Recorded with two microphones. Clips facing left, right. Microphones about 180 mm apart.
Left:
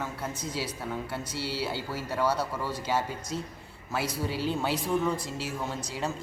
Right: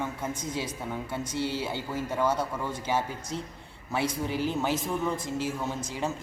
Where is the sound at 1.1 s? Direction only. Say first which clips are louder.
Right 3 dB; 5° left (ahead or behind).